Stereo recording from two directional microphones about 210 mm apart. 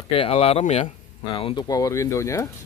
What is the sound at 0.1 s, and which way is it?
Speech, 25° left (ahead or behind).